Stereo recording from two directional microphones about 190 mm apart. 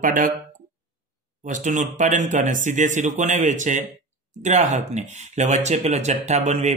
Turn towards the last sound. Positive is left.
turn(degrees=-35)  # may be behind; listen again after turning